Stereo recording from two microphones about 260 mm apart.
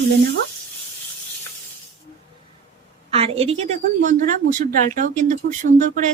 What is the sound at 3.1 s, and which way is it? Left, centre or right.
A woman's voice, right.